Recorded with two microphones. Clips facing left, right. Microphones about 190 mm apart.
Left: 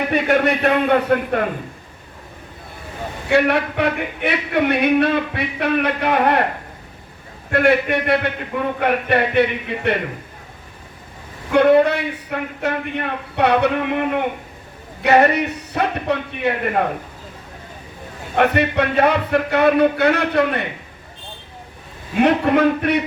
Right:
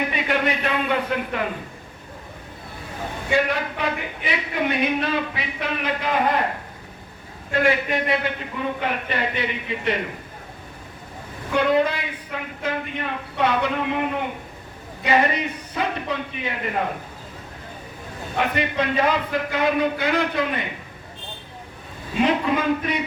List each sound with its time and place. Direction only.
0.1 s a man's voice: 55° left (ahead or behind)
3.2 s a man's voice: 65° left (ahead or behind)
7.5 s a man's voice: 65° left (ahead or behind)
11.5 s a man's voice: 65° left (ahead or behind)
18.3 s a man's voice: 65° left (ahead or behind)
22.2 s a man's voice: 65° left (ahead or behind)